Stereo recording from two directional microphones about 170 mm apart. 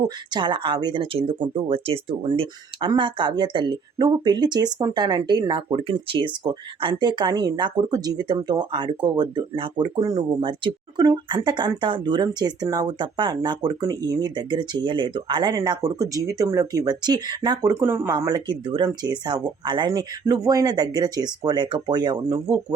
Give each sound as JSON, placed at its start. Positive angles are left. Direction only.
{"t": 0.3, "sound": "speech", "side_deg": -30}